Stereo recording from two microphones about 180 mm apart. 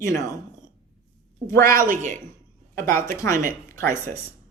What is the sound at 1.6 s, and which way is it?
Speech, 50° right (ahead or behind).